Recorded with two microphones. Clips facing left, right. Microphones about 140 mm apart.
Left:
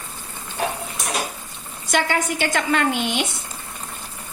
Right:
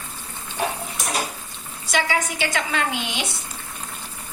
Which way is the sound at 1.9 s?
55° left (ahead or behind).